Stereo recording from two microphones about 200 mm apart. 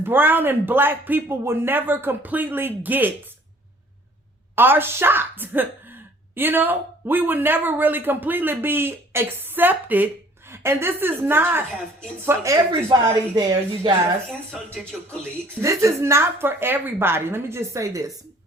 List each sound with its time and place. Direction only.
0.0 s speech: 10° right (ahead or behind)
4.5 s speech: 10° right (ahead or behind)
14.9 s speech: centre (ahead or behind)
15.6 s speech: 15° right (ahead or behind)